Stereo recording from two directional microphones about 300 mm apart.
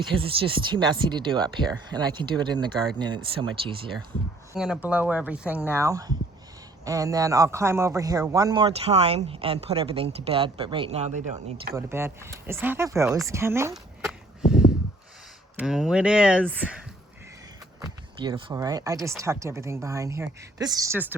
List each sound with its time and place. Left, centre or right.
0.2 s a man's voice: centre
4.5 s a man's voice: centre
11.7 s a man's voice: centre
15.5 s a man's voice: centre